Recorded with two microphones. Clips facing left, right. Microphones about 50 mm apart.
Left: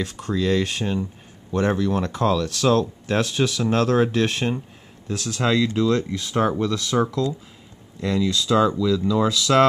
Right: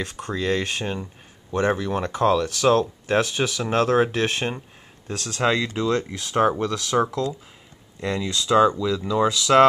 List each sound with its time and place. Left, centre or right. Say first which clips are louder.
0.0 s speech: left 3 dB; centre